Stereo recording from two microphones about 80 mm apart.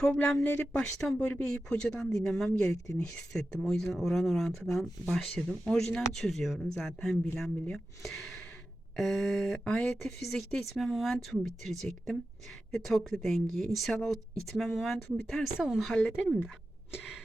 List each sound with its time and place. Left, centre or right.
0.0 s speech: centre
0.8 s speech: centre
16.2 s speech: centre